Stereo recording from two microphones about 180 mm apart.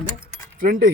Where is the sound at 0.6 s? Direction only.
55° right (ahead or behind).